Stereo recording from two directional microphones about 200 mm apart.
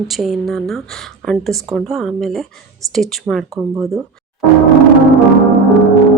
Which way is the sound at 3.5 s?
15° right (ahead or behind).